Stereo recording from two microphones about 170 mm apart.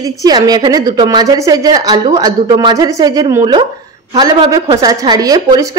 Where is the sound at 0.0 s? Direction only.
20° right (ahead or behind).